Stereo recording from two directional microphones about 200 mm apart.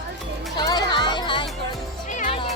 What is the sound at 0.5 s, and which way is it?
Music, 20° left (ahead or behind).